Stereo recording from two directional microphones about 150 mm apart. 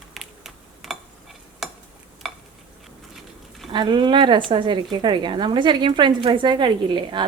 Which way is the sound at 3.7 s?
30° right (ahead or behind).